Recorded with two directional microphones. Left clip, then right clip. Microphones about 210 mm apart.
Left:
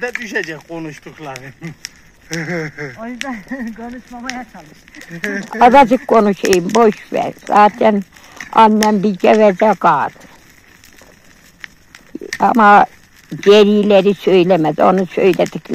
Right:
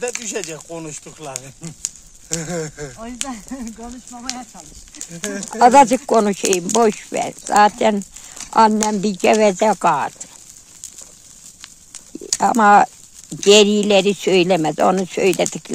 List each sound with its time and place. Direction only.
0.0 s speech: 45° right (ahead or behind)
3.3 s speech: 5° left (ahead or behind)
4.9 s speech: 45° right (ahead or behind)
5.5 s speech: centre (ahead or behind)
12.4 s a sound: centre (ahead or behind)
13.5 s speech: centre (ahead or behind)